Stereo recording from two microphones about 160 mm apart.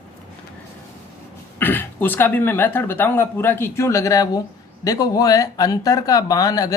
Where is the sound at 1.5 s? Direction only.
10° left (ahead or behind).